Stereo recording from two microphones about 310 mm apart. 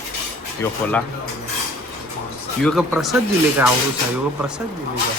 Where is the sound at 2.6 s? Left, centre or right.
Centre.